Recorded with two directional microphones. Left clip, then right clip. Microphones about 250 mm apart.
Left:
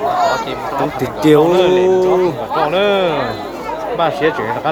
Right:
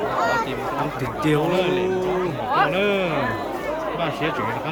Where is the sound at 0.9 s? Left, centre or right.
Centre.